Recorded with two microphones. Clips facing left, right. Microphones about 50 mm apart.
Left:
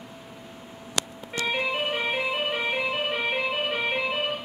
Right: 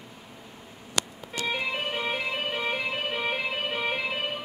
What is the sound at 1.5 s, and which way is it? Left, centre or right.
Music, centre.